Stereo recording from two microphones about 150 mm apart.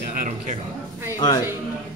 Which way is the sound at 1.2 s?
25° left (ahead or behind).